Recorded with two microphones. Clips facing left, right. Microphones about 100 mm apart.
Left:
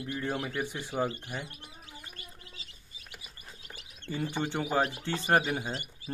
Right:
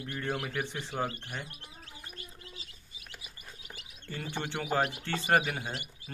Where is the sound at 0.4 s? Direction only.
15° left (ahead or behind).